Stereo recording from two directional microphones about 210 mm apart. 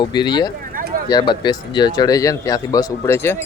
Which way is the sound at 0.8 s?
45° right (ahead or behind).